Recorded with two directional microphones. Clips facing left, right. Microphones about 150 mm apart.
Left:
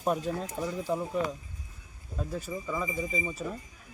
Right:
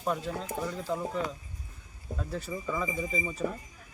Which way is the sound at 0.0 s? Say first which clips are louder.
Left 3 dB; 15° left (ahead or behind).